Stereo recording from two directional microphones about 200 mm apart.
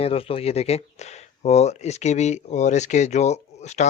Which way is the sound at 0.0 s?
30° left (ahead or behind).